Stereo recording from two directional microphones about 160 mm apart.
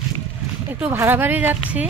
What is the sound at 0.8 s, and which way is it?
Speech, 15° right (ahead or behind).